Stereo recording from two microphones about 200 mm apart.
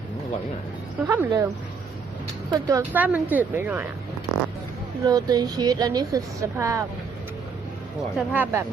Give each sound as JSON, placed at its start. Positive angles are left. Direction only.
{"t": 1.0, "sound": "speech", "side_deg": -15}
{"t": 2.5, "sound": "speech", "side_deg": -15}
{"t": 5.0, "sound": "speech", "side_deg": -20}
{"t": 8.1, "sound": "speech", "side_deg": -10}